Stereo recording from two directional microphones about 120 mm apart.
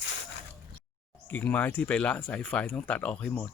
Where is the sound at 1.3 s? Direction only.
15° left (ahead or behind).